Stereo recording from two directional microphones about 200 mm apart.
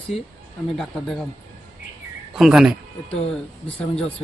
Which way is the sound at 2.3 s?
Centre (ahead or behind).